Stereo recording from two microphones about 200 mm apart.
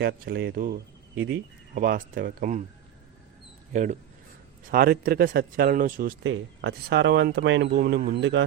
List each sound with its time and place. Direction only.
0.0 s speech: 55° right (ahead or behind)
3.7 s speech: 40° right (ahead or behind)
6.2 s speech: 65° right (ahead or behind)